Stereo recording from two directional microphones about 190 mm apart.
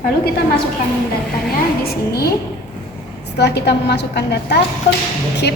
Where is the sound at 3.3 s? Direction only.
60° left (ahead or behind).